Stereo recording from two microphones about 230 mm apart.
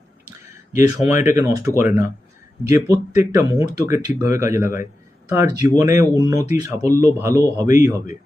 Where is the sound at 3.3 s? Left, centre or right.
Centre.